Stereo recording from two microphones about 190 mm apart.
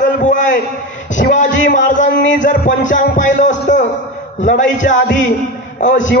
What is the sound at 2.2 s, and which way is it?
A man's voice, 40° left (ahead or behind).